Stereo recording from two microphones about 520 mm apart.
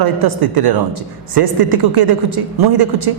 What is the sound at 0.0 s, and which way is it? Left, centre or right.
Speech, right.